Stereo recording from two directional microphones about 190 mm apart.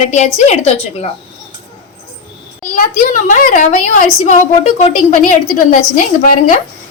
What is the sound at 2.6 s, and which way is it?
A woman's voice, 45° left (ahead or behind).